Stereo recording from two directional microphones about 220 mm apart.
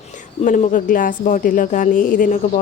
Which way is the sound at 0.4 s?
35° left (ahead or behind).